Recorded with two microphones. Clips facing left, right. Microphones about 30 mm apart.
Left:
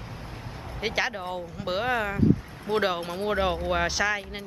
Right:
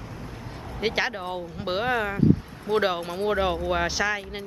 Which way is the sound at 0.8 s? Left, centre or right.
Centre.